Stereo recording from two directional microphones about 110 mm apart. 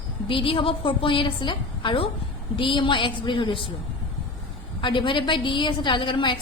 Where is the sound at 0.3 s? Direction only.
55° left (ahead or behind).